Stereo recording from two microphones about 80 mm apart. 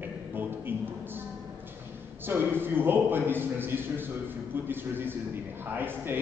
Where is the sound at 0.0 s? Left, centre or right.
Right.